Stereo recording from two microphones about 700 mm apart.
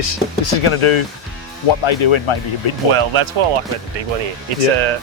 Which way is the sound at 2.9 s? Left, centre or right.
Right.